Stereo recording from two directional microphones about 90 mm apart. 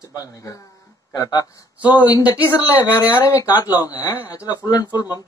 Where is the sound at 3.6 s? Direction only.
45° left (ahead or behind).